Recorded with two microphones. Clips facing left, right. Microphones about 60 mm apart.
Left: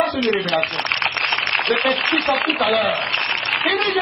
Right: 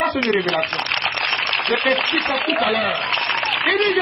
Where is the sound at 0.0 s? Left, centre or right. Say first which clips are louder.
Even; right.